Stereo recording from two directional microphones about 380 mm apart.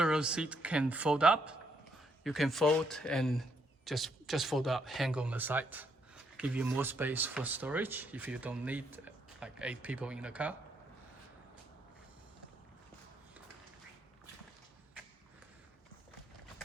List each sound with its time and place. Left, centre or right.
0.0 s speech: centre